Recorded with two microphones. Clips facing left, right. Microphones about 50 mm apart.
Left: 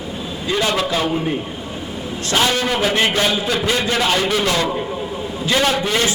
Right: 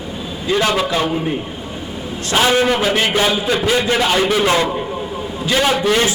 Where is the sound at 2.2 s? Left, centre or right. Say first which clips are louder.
Right 4 dB; centre.